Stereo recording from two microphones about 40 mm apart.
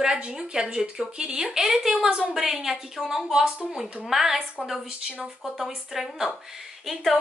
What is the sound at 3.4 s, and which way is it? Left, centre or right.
Speech, right.